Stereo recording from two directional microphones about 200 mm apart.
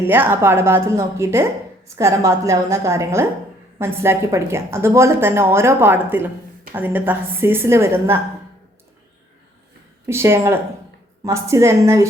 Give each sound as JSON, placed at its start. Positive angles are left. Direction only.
{"t": 0.1, "sound": "a woman's voice", "side_deg": -10}
{"t": 10.1, "sound": "a woman's voice", "side_deg": -15}